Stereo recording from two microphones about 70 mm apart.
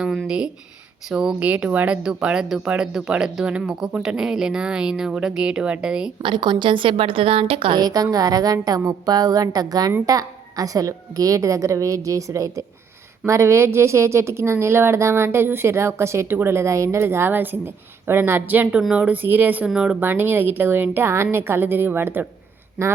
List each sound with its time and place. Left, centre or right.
0.3 s speech: centre
2.0 s speech: centre
6.3 s a woman's voice: right
7.8 s a woman's voice: right
19.6 s speech: centre
20.0 s speech: right